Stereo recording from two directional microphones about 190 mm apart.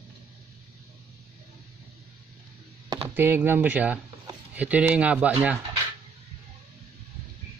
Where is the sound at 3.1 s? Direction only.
10° right (ahead or behind).